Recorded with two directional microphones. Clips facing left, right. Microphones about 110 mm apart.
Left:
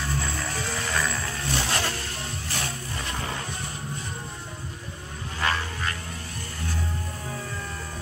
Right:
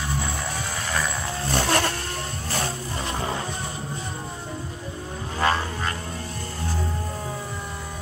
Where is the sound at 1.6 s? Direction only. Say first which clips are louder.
Right 7 dB; 50° right (ahead or behind).